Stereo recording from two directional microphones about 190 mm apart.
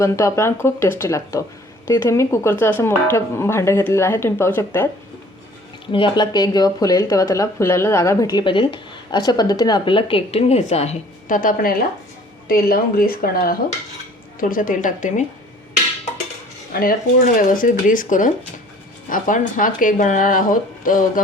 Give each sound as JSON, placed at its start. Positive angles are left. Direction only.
{"t": 0.0, "sound": "speech", "side_deg": 15}
{"t": 5.9, "sound": "speech", "side_deg": 25}
{"t": 16.7, "sound": "speech", "side_deg": 45}